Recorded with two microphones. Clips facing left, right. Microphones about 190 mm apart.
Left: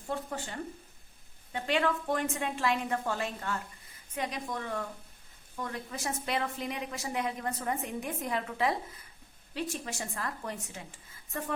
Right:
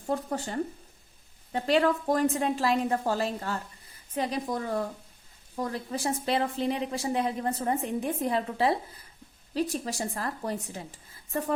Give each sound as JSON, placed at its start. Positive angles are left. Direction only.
{"t": 0.1, "sound": "a woman's voice", "side_deg": -40}